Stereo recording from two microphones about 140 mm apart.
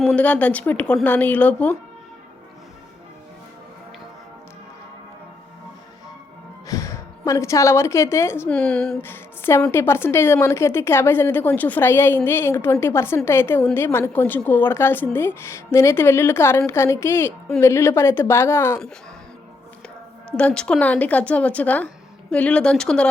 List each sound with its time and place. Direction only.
0.0 s a woman's voice: 5° left (ahead or behind)
6.7 s a woman's voice: 20° left (ahead or behind)
8.4 s a woman's voice: 5° left (ahead or behind)
20.3 s a woman's voice: 5° left (ahead or behind)